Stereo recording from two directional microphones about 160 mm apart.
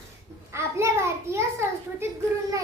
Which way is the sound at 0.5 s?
15° right (ahead or behind).